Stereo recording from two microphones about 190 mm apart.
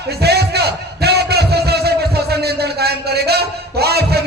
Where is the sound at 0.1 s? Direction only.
60° right (ahead or behind).